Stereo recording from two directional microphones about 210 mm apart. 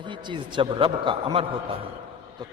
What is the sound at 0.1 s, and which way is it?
A man's voice, 20° right (ahead or behind).